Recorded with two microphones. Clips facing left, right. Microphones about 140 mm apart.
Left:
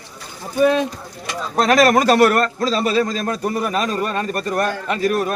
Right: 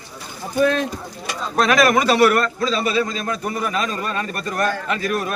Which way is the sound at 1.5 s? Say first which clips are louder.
Left 2 dB; 35° left (ahead or behind).